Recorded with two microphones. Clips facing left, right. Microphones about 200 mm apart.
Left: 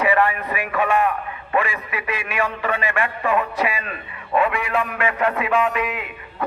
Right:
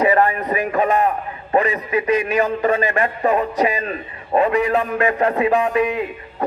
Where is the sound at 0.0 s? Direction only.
40° right (ahead or behind).